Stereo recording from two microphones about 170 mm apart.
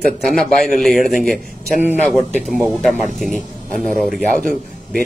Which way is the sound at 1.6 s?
10° right (ahead or behind).